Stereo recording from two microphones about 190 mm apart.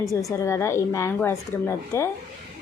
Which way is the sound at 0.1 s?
15° left (ahead or behind).